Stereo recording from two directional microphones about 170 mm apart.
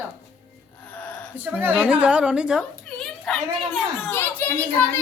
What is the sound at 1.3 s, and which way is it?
A woman's voice, 10° right (ahead or behind).